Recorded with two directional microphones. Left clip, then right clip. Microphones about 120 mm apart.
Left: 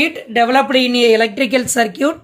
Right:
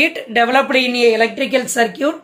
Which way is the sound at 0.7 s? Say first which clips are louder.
Left 1 dB; 60° left (ahead or behind).